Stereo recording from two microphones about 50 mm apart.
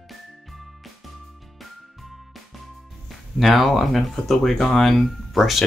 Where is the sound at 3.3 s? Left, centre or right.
Centre.